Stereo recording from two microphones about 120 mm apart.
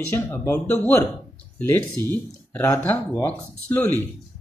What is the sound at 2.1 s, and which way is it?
Speech, 20° left (ahead or behind).